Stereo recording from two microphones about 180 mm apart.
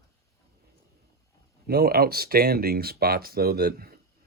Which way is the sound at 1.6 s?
60° right (ahead or behind).